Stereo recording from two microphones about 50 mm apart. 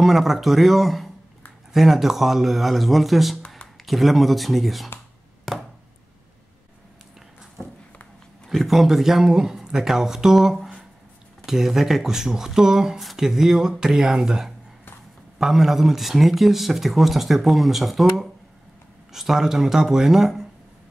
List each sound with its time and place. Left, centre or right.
0.0 s speech: centre
5.5 s a sound: centre
8.5 s speech: centre